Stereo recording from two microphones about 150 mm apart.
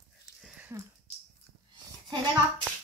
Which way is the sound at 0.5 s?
10° right (ahead or behind).